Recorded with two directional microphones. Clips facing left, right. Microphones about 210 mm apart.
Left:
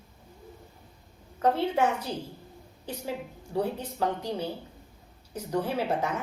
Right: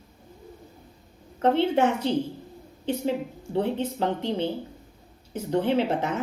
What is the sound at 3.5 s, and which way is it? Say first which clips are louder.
A woman's voice: right 4 dB; 25° right (ahead or behind).